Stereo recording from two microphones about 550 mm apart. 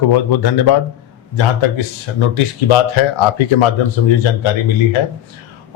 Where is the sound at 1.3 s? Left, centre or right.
Left.